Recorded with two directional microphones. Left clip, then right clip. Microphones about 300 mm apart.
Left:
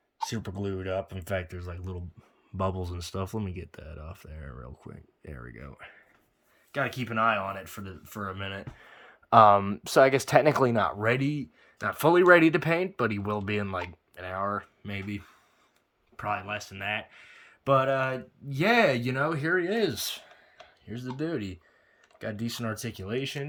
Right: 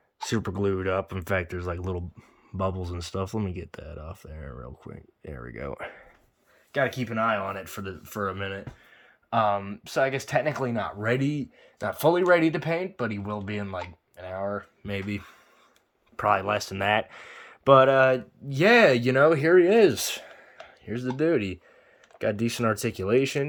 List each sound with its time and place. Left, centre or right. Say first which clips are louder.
0.3 s speech: right 8 dB; centre
6.7 s speech: right 2 dB; centre
8.8 s speech: left 3 dB; centre
11.0 s speech: even; centre